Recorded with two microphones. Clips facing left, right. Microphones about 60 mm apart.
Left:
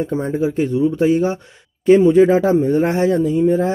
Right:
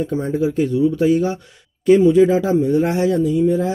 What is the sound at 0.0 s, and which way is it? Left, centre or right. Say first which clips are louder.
Speech: even; left.